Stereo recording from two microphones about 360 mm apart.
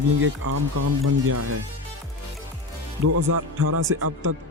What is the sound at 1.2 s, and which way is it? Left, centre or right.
Speech, right.